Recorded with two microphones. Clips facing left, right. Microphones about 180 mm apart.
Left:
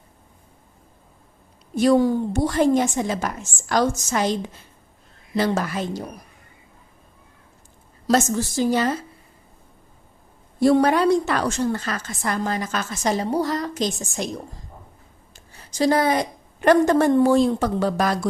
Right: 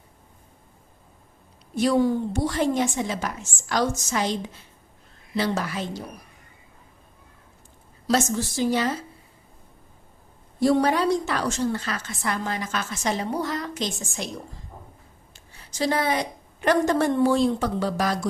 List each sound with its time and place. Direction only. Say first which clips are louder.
1.7 s a woman's voice: left 4 dB; 45° left (ahead or behind)
8.0 s a woman's voice: left 3 dB; 45° left (ahead or behind)
10.6 s a woman's voice: left 4 dB; 55° left (ahead or behind); by 14.3 s 40° left (ahead or behind)
15.3 s a woman's voice: left 5 dB; 40° left (ahead or behind)